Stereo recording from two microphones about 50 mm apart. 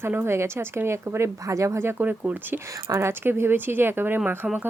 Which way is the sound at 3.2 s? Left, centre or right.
Right.